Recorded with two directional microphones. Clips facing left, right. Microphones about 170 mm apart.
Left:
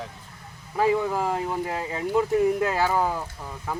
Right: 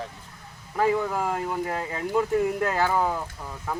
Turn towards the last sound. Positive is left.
turn(degrees=5)  # may be behind; listen again after turning